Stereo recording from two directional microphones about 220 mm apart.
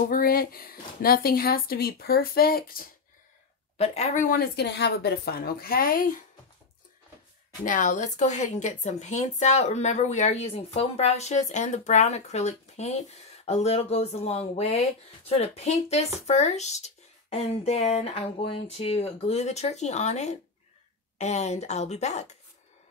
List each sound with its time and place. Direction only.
0.1 s speech: 40° left (ahead or behind)
3.7 s speech: 30° left (ahead or behind)
7.6 s a woman's voice: 35° left (ahead or behind)